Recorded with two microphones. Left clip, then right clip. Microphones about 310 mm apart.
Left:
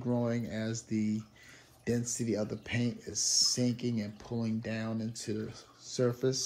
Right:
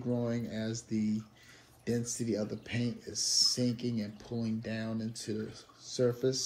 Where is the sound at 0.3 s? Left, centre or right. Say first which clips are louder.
Left 1 dB; centre.